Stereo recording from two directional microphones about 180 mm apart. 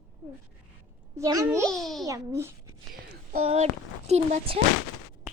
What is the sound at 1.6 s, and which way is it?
Speech, centre (ahead or behind).